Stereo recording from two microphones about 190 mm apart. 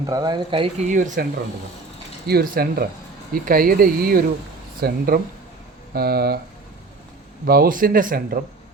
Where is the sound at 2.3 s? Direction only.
50° right (ahead or behind).